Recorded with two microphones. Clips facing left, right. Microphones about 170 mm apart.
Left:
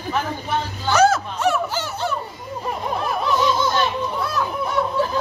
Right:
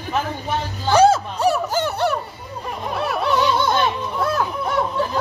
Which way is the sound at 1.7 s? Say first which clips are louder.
Right 5 dB; 55° right (ahead or behind).